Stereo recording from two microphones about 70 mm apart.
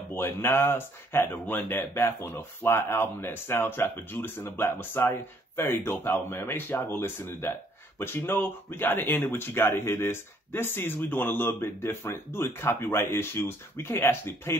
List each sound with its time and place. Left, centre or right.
0.1 s speech: left